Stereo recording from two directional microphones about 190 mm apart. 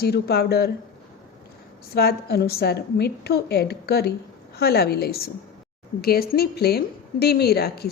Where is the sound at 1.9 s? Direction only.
55° left (ahead or behind).